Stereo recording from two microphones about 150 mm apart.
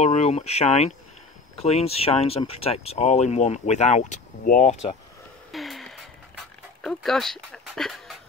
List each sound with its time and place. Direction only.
0.0 s speech: 50° left (ahead or behind)
5.5 s music: centre (ahead or behind)
6.8 s speech: 5° left (ahead or behind)